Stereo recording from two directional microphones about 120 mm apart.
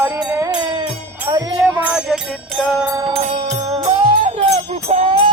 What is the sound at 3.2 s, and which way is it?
Music, 55° right (ahead or behind).